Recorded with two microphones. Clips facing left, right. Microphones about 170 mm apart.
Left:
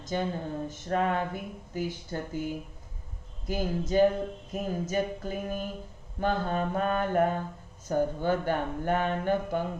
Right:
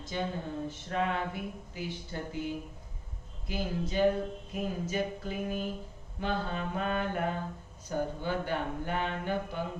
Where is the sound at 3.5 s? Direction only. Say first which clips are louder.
Left 5 dB; 45° left (ahead or behind).